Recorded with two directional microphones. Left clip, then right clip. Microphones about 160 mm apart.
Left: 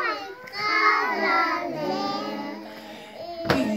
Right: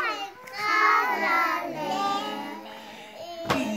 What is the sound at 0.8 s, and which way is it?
Child singing, centre (ahead or behind).